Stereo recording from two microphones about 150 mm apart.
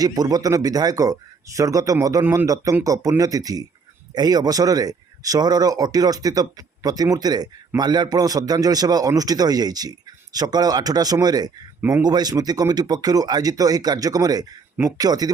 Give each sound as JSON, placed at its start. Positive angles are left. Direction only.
{"t": 0.0, "sound": "speech", "side_deg": -25}
{"t": 11.8, "sound": "speech", "side_deg": -10}
{"t": 12.0, "sound": "speech", "side_deg": -25}